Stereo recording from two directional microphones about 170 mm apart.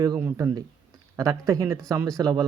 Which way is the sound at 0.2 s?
15° right (ahead or behind).